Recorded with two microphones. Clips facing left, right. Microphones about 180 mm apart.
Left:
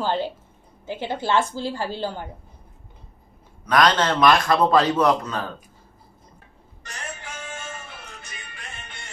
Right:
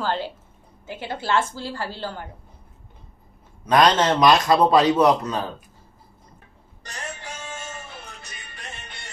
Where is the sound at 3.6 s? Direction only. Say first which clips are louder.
Right 2 dB; 25° right (ahead or behind).